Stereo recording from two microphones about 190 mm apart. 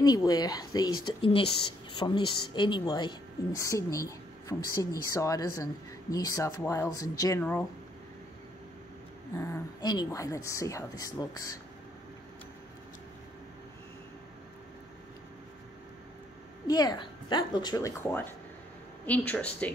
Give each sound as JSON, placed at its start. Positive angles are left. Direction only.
{"t": 0.0, "sound": "a woman's voice", "side_deg": 20}
{"t": 9.4, "sound": "speech", "side_deg": 15}
{"t": 16.6, "sound": "a woman's voice", "side_deg": 20}